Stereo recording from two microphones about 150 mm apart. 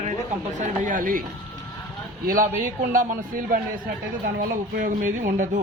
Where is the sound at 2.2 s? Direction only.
65° right (ahead or behind).